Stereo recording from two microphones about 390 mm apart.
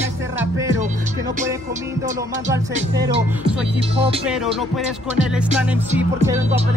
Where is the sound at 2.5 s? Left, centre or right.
Centre.